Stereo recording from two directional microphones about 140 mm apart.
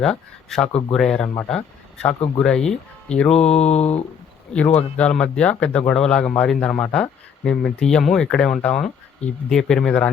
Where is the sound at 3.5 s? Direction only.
50° left (ahead or behind).